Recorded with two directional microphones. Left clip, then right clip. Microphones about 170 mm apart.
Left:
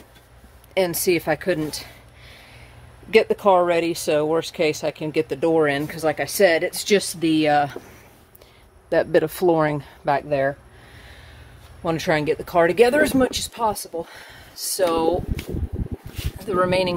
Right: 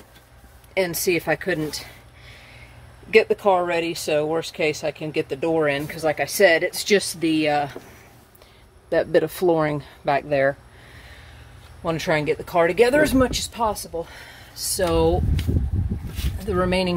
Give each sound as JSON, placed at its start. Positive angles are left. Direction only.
{"t": 0.7, "sound": "speech", "side_deg": 20}
{"t": 8.8, "sound": "speech", "side_deg": 15}
{"t": 11.8, "sound": "speech", "side_deg": 20}
{"t": 16.4, "sound": "speech", "side_deg": 15}